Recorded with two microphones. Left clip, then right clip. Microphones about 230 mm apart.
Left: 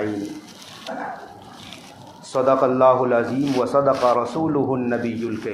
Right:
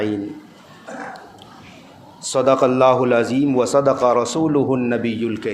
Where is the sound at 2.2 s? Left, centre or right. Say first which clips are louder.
Right 2 dB; right.